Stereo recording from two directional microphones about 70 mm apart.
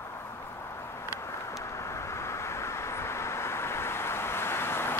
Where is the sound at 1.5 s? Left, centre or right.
Left.